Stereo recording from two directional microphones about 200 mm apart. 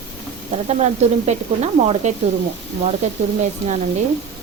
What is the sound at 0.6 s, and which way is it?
Speech, 35° right (ahead or behind).